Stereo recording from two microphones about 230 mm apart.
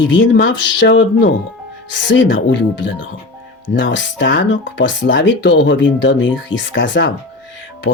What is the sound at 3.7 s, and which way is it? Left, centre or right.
Speech, left.